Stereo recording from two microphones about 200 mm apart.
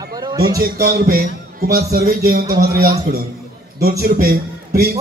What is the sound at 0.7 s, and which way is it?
A man's voice, 50° right (ahead or behind).